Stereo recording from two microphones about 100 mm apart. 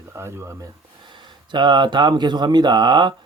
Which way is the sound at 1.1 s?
50° right (ahead or behind).